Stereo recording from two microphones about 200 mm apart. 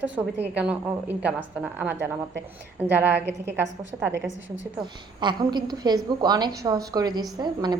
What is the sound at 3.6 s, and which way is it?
Speech, 65° right (ahead or behind).